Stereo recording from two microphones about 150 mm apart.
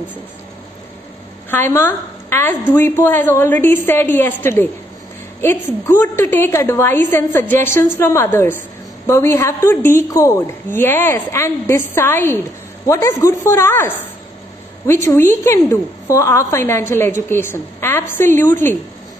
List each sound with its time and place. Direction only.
1.5 s a woman's voice: 15° left (ahead or behind)